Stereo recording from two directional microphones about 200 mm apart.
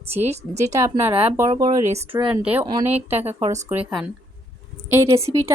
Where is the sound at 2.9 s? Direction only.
30° right (ahead or behind).